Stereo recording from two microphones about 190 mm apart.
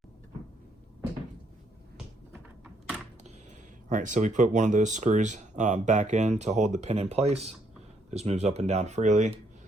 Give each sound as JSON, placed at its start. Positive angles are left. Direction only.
{"t": 3.8, "sound": "speech", "side_deg": -40}